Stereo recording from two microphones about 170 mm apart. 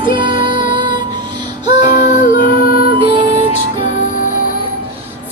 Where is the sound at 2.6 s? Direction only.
60° left (ahead or behind).